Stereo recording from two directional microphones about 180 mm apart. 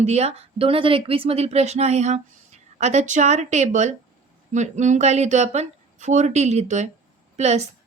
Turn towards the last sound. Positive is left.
turn(degrees=-40)  # may be behind; listen again after turning